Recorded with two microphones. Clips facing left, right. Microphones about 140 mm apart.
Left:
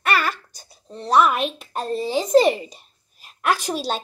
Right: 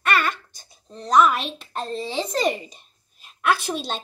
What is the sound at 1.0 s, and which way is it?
Speech, 5° left (ahead or behind).